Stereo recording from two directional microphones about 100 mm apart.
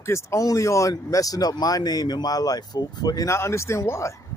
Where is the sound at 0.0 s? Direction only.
30° left (ahead or behind).